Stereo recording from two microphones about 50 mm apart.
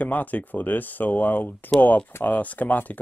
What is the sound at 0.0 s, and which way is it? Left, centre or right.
Speech, left.